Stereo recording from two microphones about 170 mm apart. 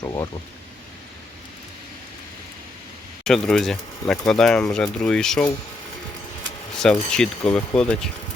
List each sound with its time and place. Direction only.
0.0 s speech: 20° left (ahead or behind)
3.2 s speech: 5° left (ahead or behind)
6.7 s speech: 5° left (ahead or behind)